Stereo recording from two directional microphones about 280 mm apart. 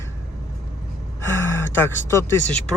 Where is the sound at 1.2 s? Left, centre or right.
Centre.